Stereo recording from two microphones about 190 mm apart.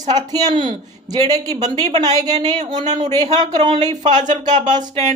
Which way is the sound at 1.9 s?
35° right (ahead or behind).